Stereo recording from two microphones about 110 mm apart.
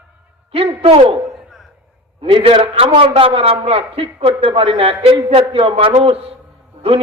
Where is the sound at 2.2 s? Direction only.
55° right (ahead or behind).